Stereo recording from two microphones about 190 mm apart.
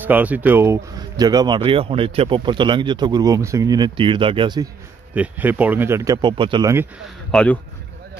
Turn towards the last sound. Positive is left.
turn(degrees=10)  # may be behind; listen again after turning